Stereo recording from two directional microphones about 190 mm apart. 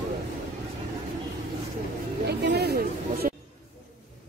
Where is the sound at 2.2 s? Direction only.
60° right (ahead or behind).